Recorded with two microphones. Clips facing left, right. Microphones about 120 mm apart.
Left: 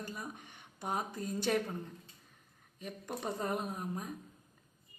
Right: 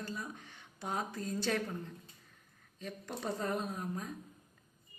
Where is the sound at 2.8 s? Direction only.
15° left (ahead or behind).